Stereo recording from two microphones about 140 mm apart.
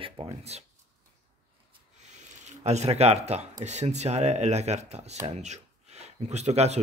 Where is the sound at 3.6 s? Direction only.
55° right (ahead or behind).